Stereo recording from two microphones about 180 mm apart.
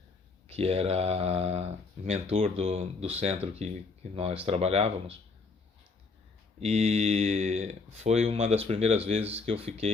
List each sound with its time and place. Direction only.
0.4 s speech: 35° right (ahead or behind)
6.6 s speech: 35° right (ahead or behind)